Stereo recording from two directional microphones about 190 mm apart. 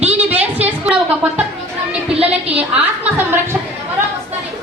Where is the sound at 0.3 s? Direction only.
5° right (ahead or behind).